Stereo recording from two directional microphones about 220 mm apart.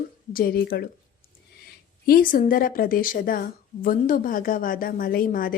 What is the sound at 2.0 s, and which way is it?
A woman's voice, 40° left (ahead or behind).